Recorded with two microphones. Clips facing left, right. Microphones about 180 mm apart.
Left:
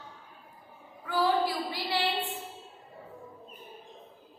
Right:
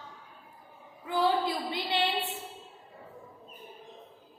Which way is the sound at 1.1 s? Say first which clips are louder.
Even; 20° right (ahead or behind).